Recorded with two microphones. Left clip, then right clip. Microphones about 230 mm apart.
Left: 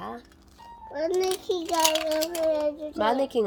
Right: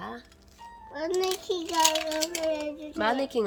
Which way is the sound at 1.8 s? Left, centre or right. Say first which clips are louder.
Even; left.